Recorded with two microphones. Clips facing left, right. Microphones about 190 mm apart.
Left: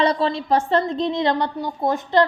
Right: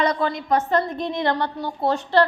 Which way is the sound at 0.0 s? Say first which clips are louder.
Left 2 dB; 30° left (ahead or behind).